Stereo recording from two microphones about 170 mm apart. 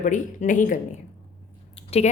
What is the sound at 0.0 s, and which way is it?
A woman's voice, 50° left (ahead or behind).